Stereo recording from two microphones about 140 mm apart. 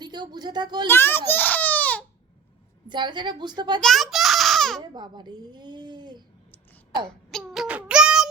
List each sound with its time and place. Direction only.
0.0 s speech: 30° right (ahead or behind)
0.9 s baby cry: 15° left (ahead or behind)
2.8 s a child's voice: 35° right (ahead or behind)
3.8 s a child's voice: centre (ahead or behind)
4.8 s a child's voice: 30° right (ahead or behind)
7.3 s child singing: centre (ahead or behind)